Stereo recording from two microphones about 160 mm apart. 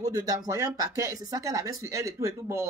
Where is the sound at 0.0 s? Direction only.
20° right (ahead or behind).